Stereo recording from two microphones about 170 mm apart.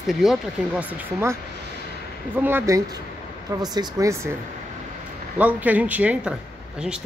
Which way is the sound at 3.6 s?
25° right (ahead or behind).